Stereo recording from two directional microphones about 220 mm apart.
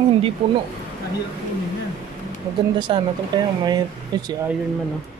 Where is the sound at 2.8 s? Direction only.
20° right (ahead or behind).